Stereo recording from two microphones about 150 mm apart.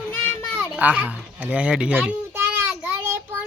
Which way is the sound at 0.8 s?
10° right (ahead or behind).